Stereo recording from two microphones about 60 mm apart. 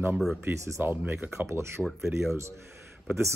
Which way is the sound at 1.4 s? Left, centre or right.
Right.